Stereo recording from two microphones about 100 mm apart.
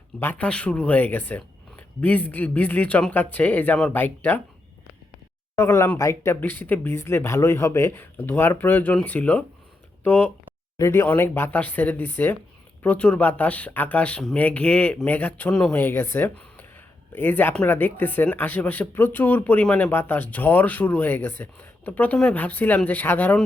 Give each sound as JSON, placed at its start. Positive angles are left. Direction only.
{"t": 0.2, "sound": "speech", "side_deg": 15}
{"t": 5.5, "sound": "speech", "side_deg": 25}